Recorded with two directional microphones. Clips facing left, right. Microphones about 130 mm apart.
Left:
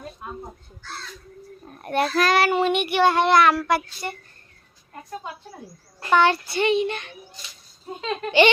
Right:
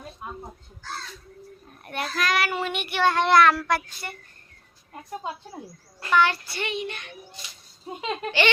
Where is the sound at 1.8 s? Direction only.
40° left (ahead or behind); by 3.2 s 15° left (ahead or behind).